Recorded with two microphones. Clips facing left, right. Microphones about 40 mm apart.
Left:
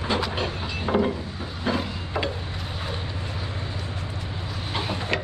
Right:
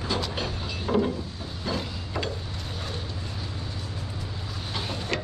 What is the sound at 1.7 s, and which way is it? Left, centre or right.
Mechanisms, left.